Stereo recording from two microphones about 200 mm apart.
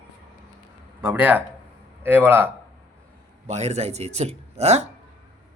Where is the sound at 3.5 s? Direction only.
35° right (ahead or behind).